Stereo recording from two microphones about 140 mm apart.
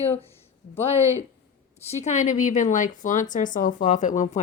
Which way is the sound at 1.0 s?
20° right (ahead or behind).